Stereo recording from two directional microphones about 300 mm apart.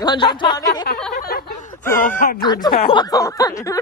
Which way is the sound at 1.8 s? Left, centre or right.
Centre.